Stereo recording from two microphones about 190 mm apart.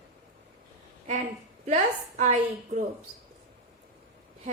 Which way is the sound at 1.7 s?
40° right (ahead or behind).